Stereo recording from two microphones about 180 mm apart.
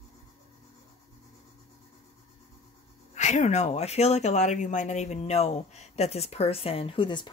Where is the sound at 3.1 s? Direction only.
40° left (ahead or behind).